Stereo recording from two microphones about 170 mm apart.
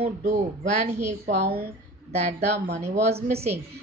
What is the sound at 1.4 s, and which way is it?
Speech, 65° right (ahead or behind).